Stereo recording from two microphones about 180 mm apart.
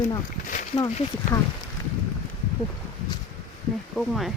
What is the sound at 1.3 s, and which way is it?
Speech, 20° left (ahead or behind).